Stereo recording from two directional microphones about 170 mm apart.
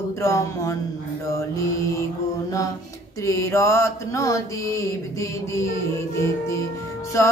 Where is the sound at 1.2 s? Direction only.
20° left (ahead or behind).